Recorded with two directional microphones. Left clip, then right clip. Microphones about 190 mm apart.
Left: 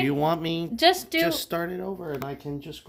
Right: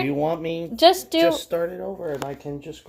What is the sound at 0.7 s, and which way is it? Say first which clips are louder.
Speech: right 5 dB; 10° right (ahead or behind).